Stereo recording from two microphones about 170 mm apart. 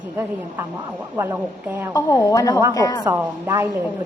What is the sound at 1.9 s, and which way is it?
A woman's voice, 20° left (ahead or behind).